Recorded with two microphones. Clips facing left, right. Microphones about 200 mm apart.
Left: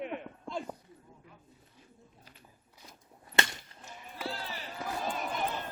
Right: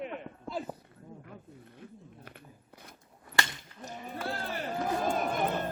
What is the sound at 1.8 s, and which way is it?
Cat, 60° right (ahead or behind).